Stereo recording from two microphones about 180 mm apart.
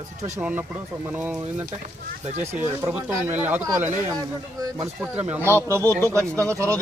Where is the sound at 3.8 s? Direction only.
45° right (ahead or behind).